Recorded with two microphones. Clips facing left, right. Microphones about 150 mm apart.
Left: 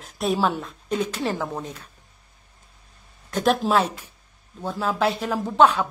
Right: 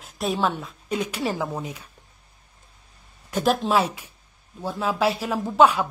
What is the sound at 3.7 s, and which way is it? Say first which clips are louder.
A man's voice: even; 10° right (ahead or behind).